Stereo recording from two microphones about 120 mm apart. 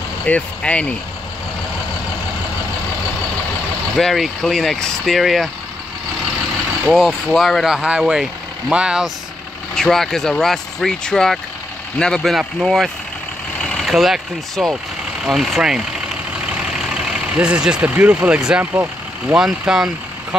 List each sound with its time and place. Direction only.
0.3 s speech: 10° left (ahead or behind)
3.9 s speech: centre (ahead or behind)
6.9 s speech: centre (ahead or behind); by 19.3 s 15° right (ahead or behind)
19.3 s speech: 5° right (ahead or behind)